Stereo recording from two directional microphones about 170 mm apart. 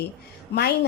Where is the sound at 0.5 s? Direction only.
90° left.